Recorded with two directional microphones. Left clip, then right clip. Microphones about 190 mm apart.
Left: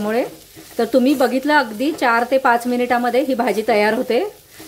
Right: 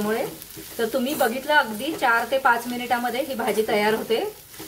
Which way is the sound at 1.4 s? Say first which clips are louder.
Left 4 dB; 50° left (ahead or behind).